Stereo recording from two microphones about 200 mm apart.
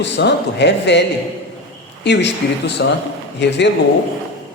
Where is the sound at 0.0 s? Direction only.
60° left (ahead or behind).